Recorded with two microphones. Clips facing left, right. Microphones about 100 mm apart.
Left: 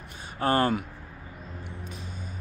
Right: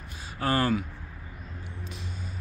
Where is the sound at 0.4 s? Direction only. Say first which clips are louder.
Left 2 dB; 30° left (ahead or behind).